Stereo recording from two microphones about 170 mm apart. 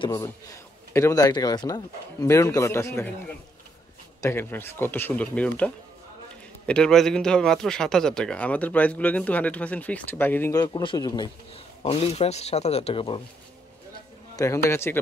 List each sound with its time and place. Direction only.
0.1 s a man's voice: 15° left (ahead or behind)
4.2 s a man's voice: 15° left (ahead or behind)
11.5 s a man's voice: 35° left (ahead or behind)
14.3 s a man's voice: 15° left (ahead or behind)